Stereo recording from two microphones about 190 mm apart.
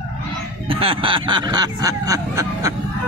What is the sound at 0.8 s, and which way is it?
A man's voice, 25° right (ahead or behind).